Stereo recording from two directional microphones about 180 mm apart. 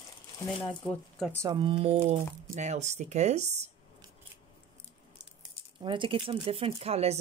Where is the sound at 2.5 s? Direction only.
40° right (ahead or behind).